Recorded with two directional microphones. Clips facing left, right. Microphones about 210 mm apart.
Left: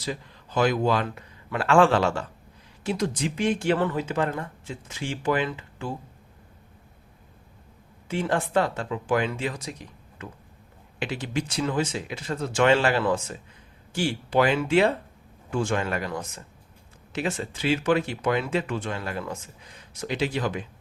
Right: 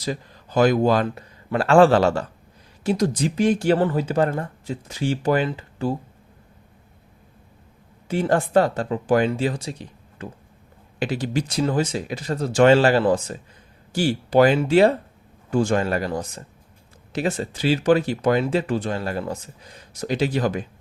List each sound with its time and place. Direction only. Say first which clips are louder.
0.0 s speech: right 4 dB; 40° right (ahead or behind)
8.0 s speech: right 5 dB; 40° right (ahead or behind)